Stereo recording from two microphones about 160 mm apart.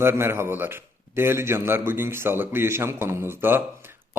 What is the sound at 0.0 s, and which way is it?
Speech, 15° right (ahead or behind).